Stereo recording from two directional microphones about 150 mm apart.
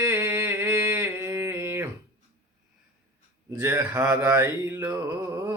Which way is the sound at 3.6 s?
20° right (ahead or behind).